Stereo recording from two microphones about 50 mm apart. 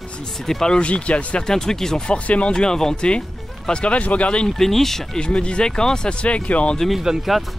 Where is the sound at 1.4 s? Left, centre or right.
Centre.